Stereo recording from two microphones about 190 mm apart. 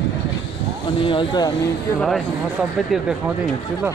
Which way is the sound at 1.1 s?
25° left (ahead or behind).